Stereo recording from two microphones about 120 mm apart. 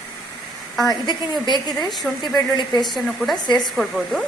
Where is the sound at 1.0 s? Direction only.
35° left (ahead or behind).